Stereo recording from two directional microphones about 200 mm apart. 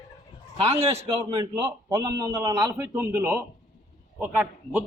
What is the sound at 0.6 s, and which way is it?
Speech, 30° right (ahead or behind).